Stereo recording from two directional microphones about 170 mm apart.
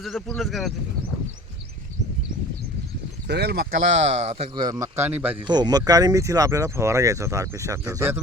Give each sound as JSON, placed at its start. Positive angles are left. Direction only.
{"t": 0.0, "sound": "speech", "side_deg": 0}
{"t": 3.2, "sound": "speech", "side_deg": -75}
{"t": 4.1, "sound": "speech", "side_deg": -40}
{"t": 4.5, "sound": "a man's voice", "side_deg": -25}
{"t": 5.4, "sound": "speech", "side_deg": -25}